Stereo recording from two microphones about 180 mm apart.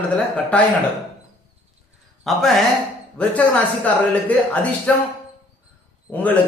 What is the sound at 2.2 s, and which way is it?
A man's voice, centre (ahead or behind).